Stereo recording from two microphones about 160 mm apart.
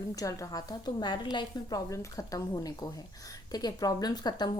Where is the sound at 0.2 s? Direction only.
20° left (ahead or behind).